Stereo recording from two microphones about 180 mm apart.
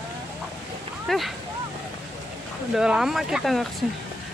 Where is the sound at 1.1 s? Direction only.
Centre (ahead or behind).